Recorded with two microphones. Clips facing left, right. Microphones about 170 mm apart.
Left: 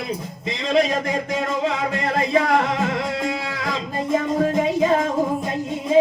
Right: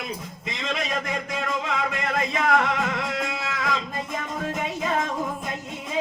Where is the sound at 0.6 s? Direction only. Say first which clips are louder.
Left 9 dB; 35° left (ahead or behind).